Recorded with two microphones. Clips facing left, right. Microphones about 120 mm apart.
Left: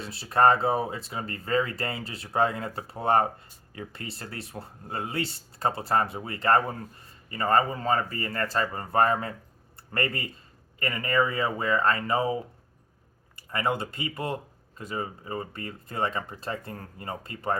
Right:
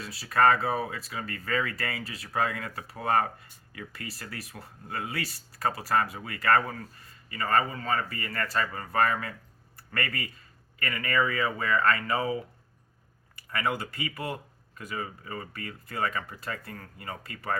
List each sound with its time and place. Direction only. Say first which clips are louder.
0.0 s speech: left 2 dB; 25° left (ahead or behind)
13.5 s speech: left 2 dB; 25° left (ahead or behind)